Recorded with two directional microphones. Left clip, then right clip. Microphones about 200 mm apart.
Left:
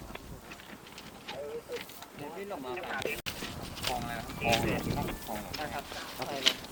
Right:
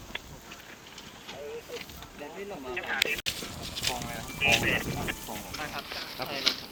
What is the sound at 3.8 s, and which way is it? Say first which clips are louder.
Boat: right 2 dB; 35° left (ahead or behind).